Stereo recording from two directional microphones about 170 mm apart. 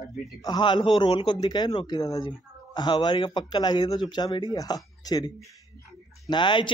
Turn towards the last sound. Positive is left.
turn(degrees=30)  # may be behind; listen again after turning